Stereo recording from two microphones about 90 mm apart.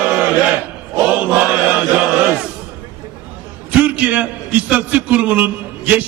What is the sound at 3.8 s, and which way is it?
A man's voice, 15° right (ahead or behind).